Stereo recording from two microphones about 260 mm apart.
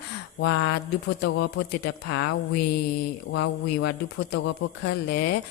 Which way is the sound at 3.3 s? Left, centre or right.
Left.